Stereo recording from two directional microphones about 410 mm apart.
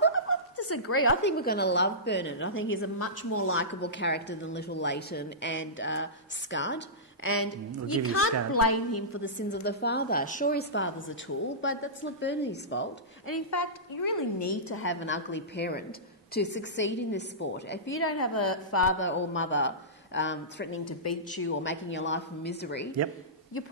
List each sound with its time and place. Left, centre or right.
0.0 s a woman's voice: left
13.3 s a woman's voice: left
14.7 s a woman's voice: left
20.8 s a woman's voice: left